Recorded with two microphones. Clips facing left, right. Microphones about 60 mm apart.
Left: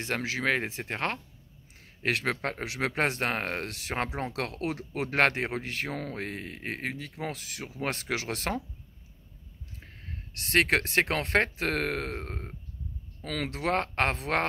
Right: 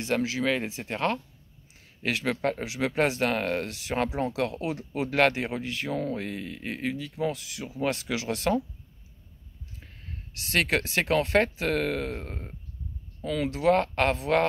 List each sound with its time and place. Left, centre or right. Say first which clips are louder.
0.0 s speech: right 3 dB; left
10.4 s speech: left 1 dB; left
13.2 s speech: right 6 dB; left